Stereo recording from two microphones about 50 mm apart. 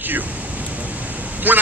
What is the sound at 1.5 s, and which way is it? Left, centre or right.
Speech, right.